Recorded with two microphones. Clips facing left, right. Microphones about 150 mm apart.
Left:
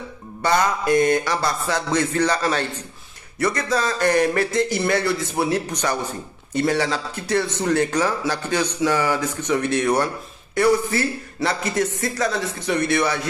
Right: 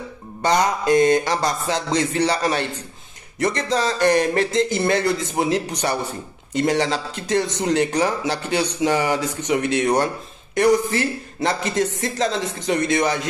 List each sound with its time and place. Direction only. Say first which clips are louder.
0.4 s speech: right 1 dB; 20° right (ahead or behind)